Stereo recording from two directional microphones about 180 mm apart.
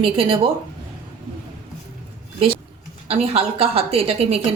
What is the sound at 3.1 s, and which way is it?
Speech, 35° right (ahead or behind).